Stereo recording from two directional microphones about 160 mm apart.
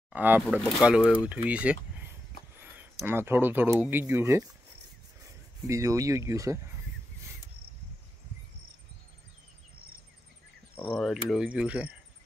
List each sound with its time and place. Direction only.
0.1 s speech: 10° right (ahead or behind)
10.8 s speech: 5° left (ahead or behind)